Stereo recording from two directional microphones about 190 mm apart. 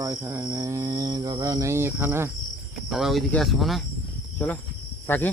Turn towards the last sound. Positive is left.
turn(degrees=10)  # may be behind; listen again after turning